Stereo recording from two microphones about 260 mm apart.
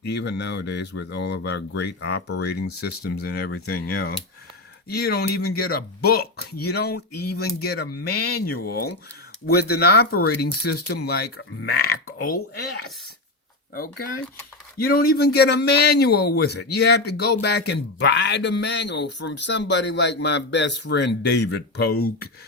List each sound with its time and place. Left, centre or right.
0.0 s a man's voice: left
14.9 s a man's voice: left